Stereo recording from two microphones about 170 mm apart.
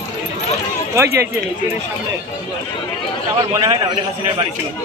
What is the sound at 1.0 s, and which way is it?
Speech, 15° right (ahead or behind).